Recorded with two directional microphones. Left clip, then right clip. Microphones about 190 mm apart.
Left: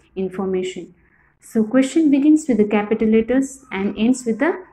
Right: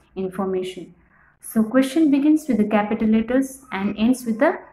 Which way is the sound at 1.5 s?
Centre (ahead or behind).